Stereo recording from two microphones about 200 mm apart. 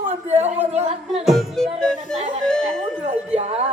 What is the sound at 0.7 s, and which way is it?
Music, 30° right (ahead or behind).